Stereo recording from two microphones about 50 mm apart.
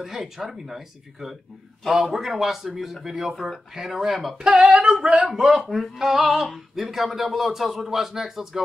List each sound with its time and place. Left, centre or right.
0.0 s speech: centre
4.5 s singing: right
5.3 s speech: centre